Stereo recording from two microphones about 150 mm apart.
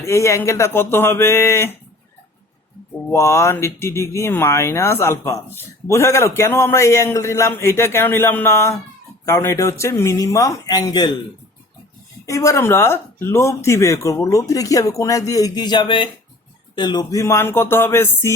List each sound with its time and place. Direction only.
0.0 s speech: 20° left (ahead or behind)
3.1 s speech: 20° left (ahead or behind)
12.2 s speech: 20° left (ahead or behind)